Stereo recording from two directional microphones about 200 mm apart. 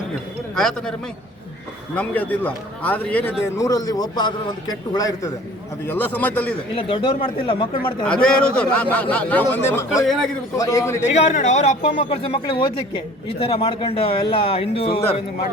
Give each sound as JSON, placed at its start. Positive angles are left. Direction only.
{"t": 0.5, "sound": "a man's voice", "side_deg": 0}
{"t": 2.0, "sound": "a man's voice", "side_deg": 10}
{"t": 6.7, "sound": "speech", "side_deg": 25}
{"t": 8.0, "sound": "a man's voice", "side_deg": 5}
{"t": 9.9, "sound": "a man's voice", "side_deg": 0}
{"t": 10.6, "sound": "a man's voice", "side_deg": 15}
{"t": 11.1, "sound": "speech", "side_deg": 35}